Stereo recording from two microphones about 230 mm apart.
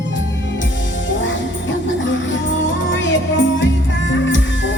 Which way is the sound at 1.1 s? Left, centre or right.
Left.